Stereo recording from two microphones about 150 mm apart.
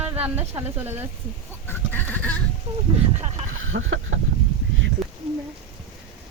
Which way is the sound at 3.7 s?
80° right.